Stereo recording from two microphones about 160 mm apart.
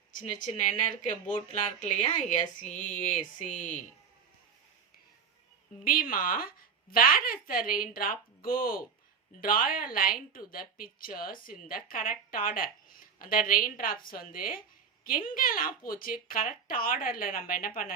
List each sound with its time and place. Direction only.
0.1 s speech: 55° left (ahead or behind)
1.8 s speech: 50° left (ahead or behind)
5.8 s a woman's voice: 60° left (ahead or behind)